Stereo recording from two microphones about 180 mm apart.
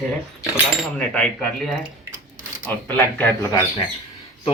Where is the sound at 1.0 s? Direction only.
5° left (ahead or behind).